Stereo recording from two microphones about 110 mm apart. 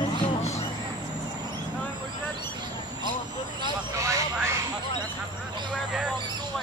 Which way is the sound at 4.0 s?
25° right (ahead or behind).